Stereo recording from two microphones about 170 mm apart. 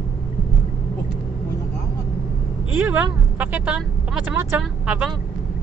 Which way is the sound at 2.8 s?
10° right (ahead or behind).